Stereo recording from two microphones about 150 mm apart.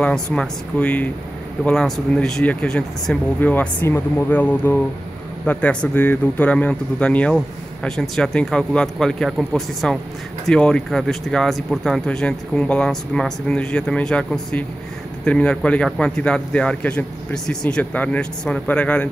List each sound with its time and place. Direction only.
0.0 s a man's voice: 5° left (ahead or behind)